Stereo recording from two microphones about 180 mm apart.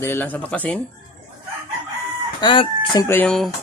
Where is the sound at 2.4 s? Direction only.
25° left (ahead or behind).